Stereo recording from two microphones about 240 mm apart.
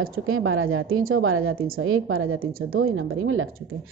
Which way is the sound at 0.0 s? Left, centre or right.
Right.